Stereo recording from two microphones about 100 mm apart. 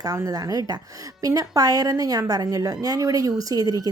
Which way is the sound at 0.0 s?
40° right (ahead or behind).